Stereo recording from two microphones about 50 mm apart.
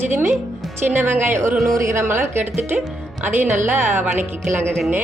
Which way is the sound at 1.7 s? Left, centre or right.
Right.